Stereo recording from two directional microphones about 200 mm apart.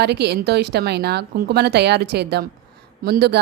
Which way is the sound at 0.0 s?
55° right (ahead or behind).